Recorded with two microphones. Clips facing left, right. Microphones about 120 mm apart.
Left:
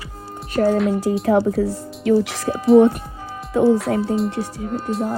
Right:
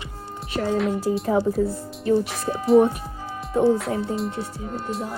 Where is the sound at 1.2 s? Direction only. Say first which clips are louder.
Left 5 dB; 80° left.